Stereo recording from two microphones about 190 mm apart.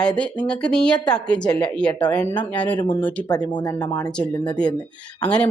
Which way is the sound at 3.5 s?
20° left (ahead or behind).